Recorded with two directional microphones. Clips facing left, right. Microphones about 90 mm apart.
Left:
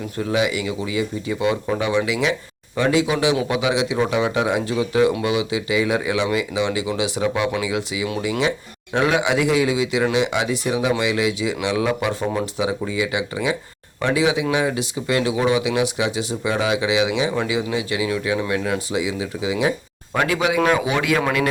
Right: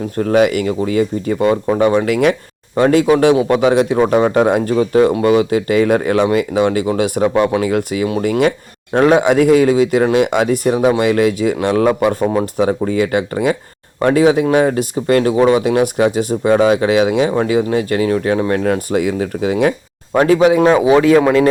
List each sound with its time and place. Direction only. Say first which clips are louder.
0.2 s speech: right 8 dB; 50° right (ahead or behind)
20.1 s speech: right 9 dB; 35° right (ahead or behind)